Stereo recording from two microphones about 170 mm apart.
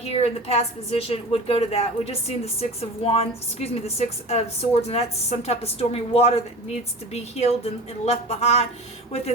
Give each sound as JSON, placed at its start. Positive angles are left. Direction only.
{"t": 0.0, "sound": "a woman's voice", "side_deg": 40}